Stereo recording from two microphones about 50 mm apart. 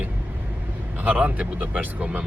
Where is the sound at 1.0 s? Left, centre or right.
Right.